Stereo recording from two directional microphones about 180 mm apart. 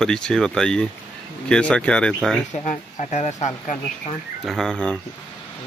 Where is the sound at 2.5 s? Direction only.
40° left (ahead or behind).